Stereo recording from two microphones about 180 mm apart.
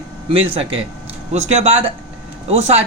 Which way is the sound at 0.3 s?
30° right (ahead or behind).